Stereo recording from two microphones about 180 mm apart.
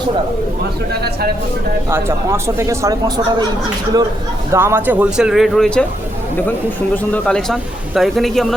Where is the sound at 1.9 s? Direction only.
15° right (ahead or behind).